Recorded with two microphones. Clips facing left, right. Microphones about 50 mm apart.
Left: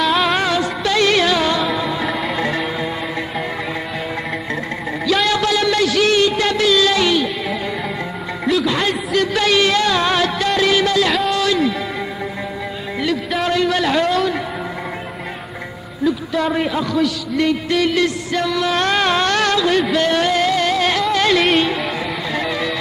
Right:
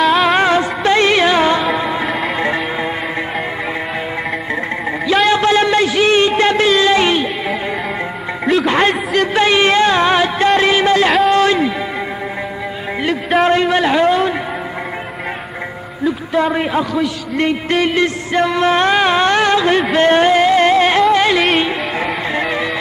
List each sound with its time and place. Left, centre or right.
0.0 s music: centre
0.4 s music of bollywood: right
1.8 s music: right
2.0 s music: centre
2.3 s music: right
5.0 s a sound: right
8.6 s a sound: right
13.4 s a sound: right
16.5 s a man's voice: right
18.9 s carnatic music: right
19.9 s a sound: right
21.1 s carnatic music: centre
22.3 s music: right